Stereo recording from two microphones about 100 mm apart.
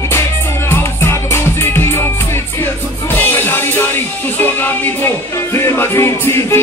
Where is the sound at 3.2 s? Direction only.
20° left (ahead or behind).